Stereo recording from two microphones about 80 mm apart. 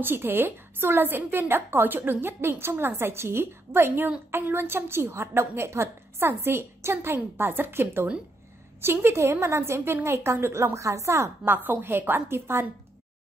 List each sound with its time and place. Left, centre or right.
0.0 s a woman's voice: right
11.4 s a woman's voice: right